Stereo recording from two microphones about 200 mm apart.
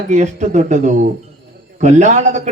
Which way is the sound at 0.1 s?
35° right (ahead or behind).